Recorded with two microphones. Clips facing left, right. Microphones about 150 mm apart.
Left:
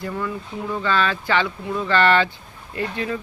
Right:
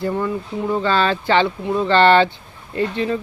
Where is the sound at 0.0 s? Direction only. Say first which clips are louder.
Right 6 dB; 30° right (ahead or behind).